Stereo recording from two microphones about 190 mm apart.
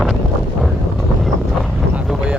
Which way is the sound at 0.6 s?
Centre (ahead or behind).